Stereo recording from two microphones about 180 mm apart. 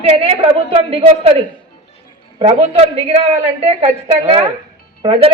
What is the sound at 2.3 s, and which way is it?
A man's voice, 35° right (ahead or behind).